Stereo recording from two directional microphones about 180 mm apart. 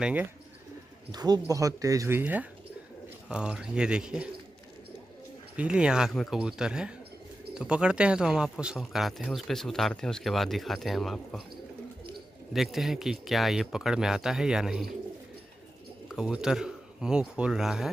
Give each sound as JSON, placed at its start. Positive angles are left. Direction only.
{"t": 0.0, "sound": "speech", "side_deg": -10}
{"t": 1.1, "sound": "speech", "side_deg": -20}
{"t": 5.6, "sound": "speech", "side_deg": -5}
{"t": 12.5, "sound": "speech", "side_deg": 0}
{"t": 16.2, "sound": "speech", "side_deg": -5}